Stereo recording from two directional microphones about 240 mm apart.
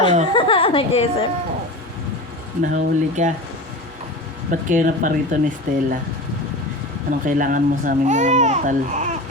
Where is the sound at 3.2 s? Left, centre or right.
Right.